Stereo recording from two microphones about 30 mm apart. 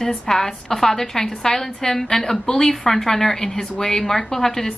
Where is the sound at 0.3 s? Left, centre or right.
Centre.